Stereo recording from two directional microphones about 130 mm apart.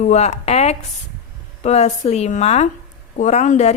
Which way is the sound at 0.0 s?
60° left (ahead or behind).